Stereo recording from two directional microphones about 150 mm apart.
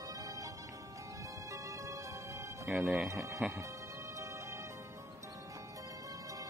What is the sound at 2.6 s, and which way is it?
Speech, centre (ahead or behind).